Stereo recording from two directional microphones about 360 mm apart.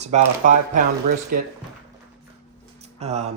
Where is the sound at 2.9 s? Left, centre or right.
Centre.